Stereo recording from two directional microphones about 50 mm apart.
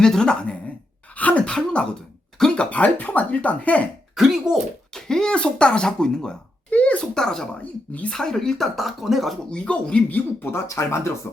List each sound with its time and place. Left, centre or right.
0.0 s speech: centre
1.1 s a sound: left
1.5 s throat clearing: centre
2.6 s speech: left
4.1 s speech: centre
4.9 s speech: centre
5.3 s speech: left
6.7 s speech: left
7.0 s speech: centre
7.6 s speech: left
8.1 s speech: centre
9.5 s speech: centre
10.5 s speech: left